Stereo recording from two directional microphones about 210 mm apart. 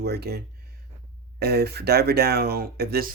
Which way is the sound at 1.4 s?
50° right (ahead or behind).